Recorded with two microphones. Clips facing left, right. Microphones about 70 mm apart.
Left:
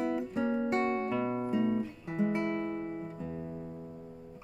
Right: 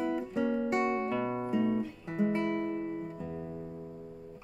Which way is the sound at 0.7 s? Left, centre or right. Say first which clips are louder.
Even; centre.